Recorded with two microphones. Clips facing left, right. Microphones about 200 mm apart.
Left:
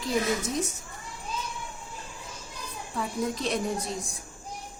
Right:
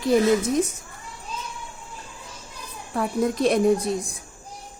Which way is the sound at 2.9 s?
60° right (ahead or behind).